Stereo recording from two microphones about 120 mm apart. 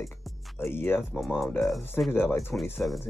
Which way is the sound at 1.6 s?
Centre (ahead or behind).